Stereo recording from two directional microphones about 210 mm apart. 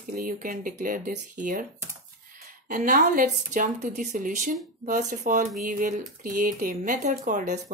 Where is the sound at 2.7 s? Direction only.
40° right (ahead or behind).